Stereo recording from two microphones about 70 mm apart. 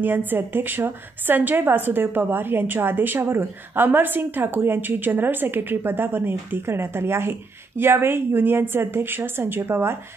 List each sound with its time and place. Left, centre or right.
0.0 s a woman's voice: right